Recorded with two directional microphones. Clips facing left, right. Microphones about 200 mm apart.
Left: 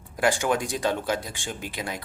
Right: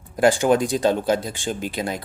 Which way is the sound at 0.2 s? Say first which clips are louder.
Right 7 dB; 35° right (ahead or behind).